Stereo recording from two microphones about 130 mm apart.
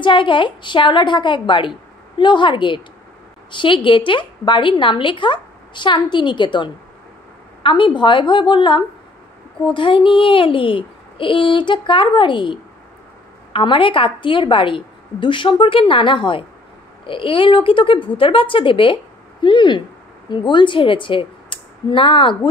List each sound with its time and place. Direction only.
0.0 s a woman's voice: 40° left (ahead or behind)